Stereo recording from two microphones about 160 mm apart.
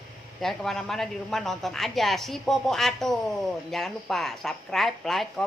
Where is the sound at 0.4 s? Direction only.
Centre (ahead or behind).